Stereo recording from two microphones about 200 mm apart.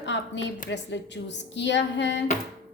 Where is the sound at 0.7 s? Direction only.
60° left (ahead or behind).